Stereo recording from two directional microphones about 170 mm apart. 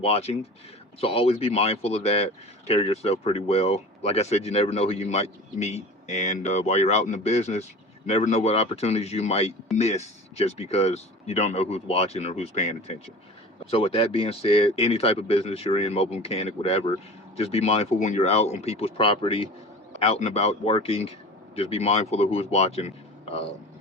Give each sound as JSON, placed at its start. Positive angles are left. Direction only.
{"t": 0.0, "sound": "speech", "side_deg": 35}